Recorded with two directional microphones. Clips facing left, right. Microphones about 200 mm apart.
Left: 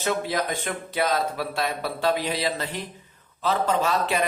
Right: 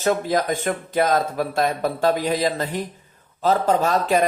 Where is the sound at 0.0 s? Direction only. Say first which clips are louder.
Right 5 dB; 45° right (ahead or behind).